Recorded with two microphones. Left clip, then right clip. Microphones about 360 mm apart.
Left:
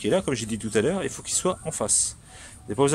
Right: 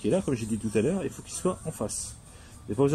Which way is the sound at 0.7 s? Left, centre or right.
Left.